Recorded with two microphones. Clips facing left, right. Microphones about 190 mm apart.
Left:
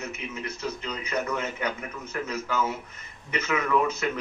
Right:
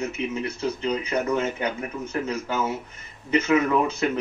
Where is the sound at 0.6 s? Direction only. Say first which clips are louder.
Right 8 dB; 30° right (ahead or behind).